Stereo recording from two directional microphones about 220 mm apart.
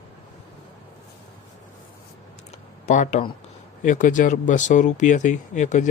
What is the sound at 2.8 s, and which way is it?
Speech, 35° left (ahead or behind).